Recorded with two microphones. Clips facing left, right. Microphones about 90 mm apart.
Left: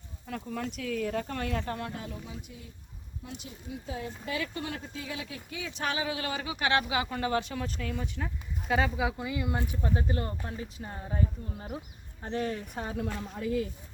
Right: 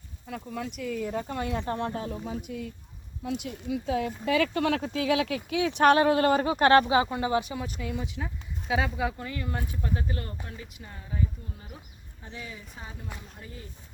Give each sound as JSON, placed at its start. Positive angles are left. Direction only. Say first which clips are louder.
{"t": 0.3, "sound": "speech", "louder": "even", "side_deg": -5}
{"t": 1.2, "sound": "speech", "louder": "right 2 dB", "side_deg": -15}
{"t": 2.5, "sound": "speech", "louder": "right 12 dB", "side_deg": -65}
{"t": 7.1, "sound": "speech", "louder": "right 3 dB", "side_deg": -15}
{"t": 12.2, "sound": "speech", "louder": "left 10 dB", "side_deg": 50}
{"t": 13.1, "sound": "speech", "louder": "left 14 dB", "side_deg": 90}